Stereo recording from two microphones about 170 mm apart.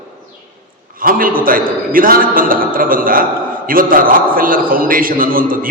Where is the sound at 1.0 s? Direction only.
55° right (ahead or behind).